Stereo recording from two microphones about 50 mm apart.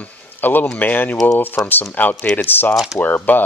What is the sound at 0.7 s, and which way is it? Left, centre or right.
Speech, left.